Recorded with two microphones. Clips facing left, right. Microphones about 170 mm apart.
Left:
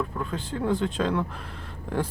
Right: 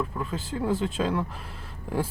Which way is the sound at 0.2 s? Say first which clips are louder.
Even; 5° right (ahead or behind).